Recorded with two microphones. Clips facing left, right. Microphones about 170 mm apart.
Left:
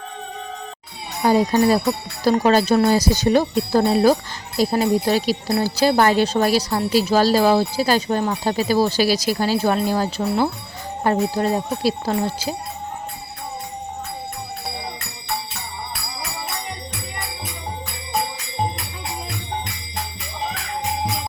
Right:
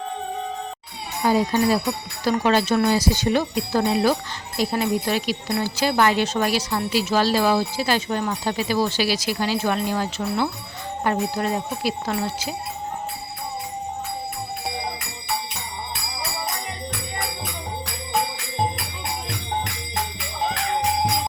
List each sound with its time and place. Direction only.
1.2 s speech: 45° left (ahead or behind)